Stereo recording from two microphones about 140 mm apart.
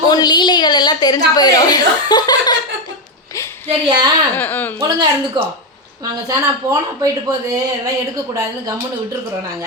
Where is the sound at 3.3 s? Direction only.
20° left (ahead or behind).